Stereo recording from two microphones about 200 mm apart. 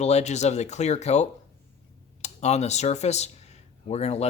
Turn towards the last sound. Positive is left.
turn(degrees=30)  # may be behind; listen again after turning